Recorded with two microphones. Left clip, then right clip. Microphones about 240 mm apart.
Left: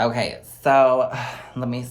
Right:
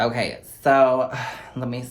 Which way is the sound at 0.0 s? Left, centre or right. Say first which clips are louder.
Left 1 dB; centre.